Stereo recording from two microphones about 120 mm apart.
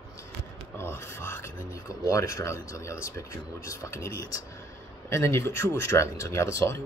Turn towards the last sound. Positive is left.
turn(degrees=25)  # may be behind; listen again after turning